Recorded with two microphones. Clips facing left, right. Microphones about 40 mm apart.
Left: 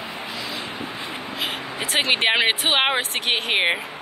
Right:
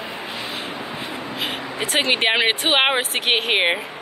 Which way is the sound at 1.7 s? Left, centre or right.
Centre.